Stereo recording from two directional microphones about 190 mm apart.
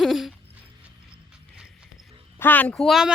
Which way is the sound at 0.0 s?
Centre (ahead or behind).